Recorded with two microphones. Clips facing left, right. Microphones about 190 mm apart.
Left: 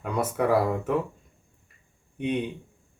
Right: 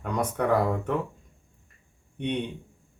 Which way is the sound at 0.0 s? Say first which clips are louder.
Left 1 dB; 5° left (ahead or behind).